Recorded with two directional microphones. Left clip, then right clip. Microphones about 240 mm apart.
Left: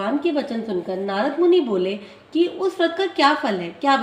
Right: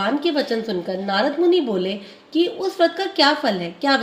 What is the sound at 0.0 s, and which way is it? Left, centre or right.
A woman's voice, right.